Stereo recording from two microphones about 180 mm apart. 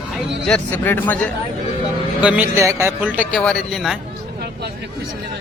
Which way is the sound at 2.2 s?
10° right (ahead or behind).